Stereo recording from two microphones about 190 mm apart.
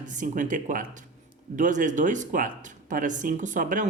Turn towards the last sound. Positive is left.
turn(degrees=-45)  # may be behind; listen again after turning